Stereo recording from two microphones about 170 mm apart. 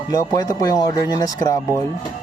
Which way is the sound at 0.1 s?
20° left (ahead or behind).